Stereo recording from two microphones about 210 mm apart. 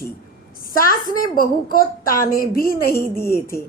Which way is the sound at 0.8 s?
45° left (ahead or behind).